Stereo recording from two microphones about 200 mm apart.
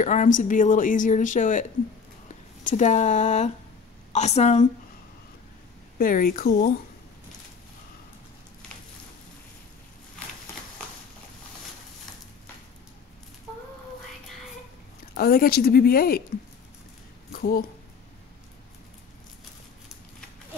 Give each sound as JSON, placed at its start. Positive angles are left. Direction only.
{"t": 0.0, "sound": "a woman's voice", "side_deg": 40}
{"t": 5.9, "sound": "speech", "side_deg": 45}
{"t": 15.1, "sound": "speech", "side_deg": 45}
{"t": 17.3, "sound": "speech", "side_deg": 45}